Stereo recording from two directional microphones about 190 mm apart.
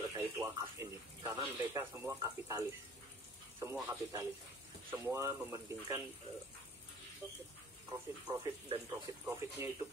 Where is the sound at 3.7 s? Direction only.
10° right (ahead or behind).